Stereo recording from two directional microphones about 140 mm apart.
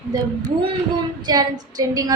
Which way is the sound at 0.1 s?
25° right (ahead or behind).